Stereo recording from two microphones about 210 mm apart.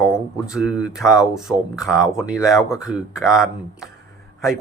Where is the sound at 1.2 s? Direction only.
Centre (ahead or behind).